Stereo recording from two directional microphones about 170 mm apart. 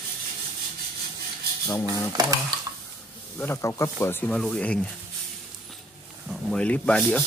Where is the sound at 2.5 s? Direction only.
25° right (ahead or behind).